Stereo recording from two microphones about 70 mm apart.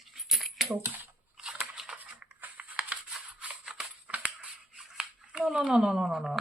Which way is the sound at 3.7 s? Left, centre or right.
Centre.